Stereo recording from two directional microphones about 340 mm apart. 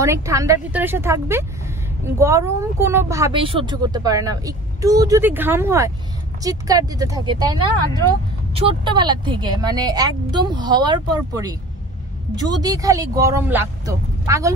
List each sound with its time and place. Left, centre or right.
0.0 s speech: centre